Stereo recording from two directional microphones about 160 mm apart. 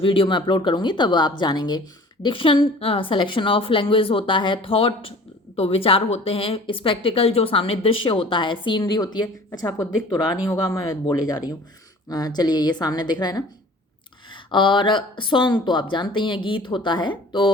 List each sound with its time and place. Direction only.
0.0 s a woman's voice: 35° left (ahead or behind)